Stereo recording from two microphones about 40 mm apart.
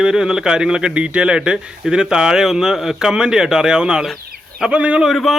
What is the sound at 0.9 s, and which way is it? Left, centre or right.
Speech, right.